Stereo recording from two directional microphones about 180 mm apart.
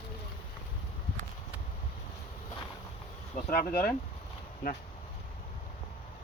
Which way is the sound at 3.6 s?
55° left (ahead or behind).